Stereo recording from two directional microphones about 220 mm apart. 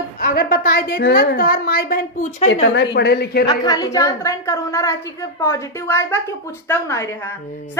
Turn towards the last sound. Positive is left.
turn(degrees=15)  # may be behind; listen again after turning